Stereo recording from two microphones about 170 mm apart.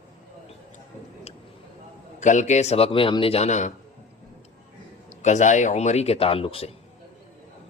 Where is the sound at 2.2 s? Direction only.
45° left (ahead or behind).